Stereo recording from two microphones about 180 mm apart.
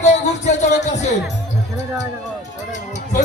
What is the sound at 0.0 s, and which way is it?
Music, 40° left (ahead or behind).